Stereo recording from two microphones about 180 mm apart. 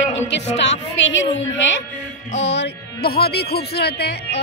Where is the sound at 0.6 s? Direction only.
90° left.